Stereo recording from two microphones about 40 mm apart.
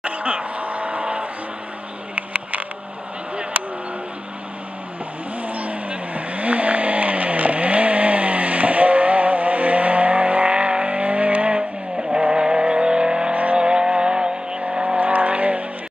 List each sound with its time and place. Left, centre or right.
0.0 s vehicle: right
2.1 s a sound: right
3.6 s vehicle: right
5.5 s vehicle: right
12.0 s vehicle: right
13.3 s vehicle: right
13.6 s vehicle: right